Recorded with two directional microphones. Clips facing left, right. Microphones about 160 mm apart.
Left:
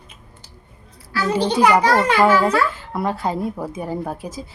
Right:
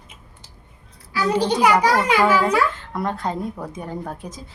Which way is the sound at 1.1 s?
15° right (ahead or behind).